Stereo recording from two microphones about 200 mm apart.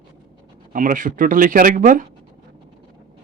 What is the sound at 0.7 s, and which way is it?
Speech, 40° right (ahead or behind).